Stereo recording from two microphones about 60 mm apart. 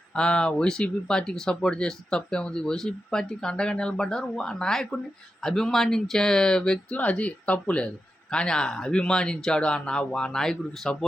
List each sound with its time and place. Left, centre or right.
0.2 s speech: centre
6.9 s speech: left